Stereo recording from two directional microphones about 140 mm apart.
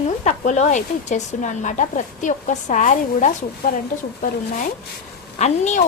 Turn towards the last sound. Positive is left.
turn(degrees=55)  # may be behind; listen again after turning